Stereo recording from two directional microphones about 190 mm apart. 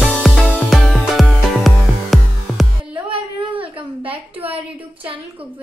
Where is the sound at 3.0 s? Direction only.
30° right (ahead or behind).